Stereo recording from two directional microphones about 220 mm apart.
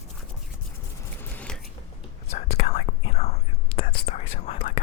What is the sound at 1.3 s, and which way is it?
Scissors, 5° left (ahead or behind).